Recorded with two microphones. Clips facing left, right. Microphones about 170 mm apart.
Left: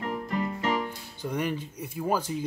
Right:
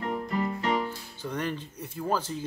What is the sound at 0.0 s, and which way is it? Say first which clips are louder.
Music: right 1 dB; 35° right (ahead or behind).